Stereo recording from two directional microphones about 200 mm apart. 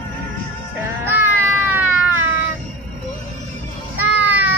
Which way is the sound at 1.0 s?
10° right (ahead or behind).